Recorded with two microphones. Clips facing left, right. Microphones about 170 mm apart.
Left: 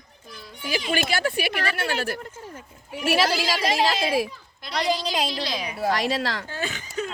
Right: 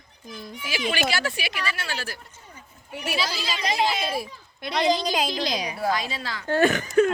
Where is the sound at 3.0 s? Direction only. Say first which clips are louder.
Left 7 dB; 85° left.